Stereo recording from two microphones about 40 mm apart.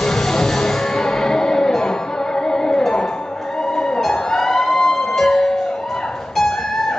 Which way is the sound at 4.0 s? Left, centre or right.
Centre.